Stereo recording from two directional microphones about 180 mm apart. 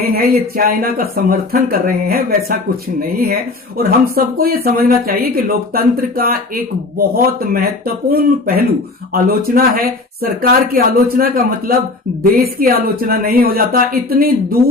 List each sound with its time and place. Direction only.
0.0 s speech: 55° right (ahead or behind)